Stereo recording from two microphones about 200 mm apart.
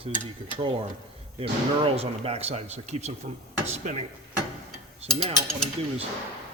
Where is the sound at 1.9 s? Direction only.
30° right (ahead or behind).